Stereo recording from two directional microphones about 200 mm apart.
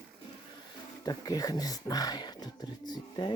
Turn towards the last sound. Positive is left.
turn(degrees=20)  # may be behind; listen again after turning